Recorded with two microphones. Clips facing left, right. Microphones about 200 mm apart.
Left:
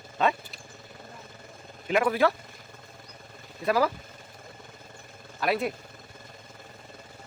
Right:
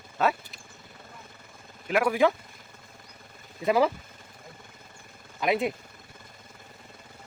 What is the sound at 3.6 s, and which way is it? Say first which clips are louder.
Speech: right 2 dB; 20° right (ahead or behind).